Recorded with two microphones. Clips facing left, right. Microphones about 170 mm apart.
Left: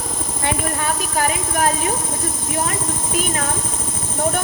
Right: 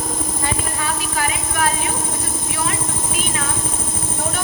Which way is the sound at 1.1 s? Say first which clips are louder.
Left 4 dB; 40° left (ahead or behind).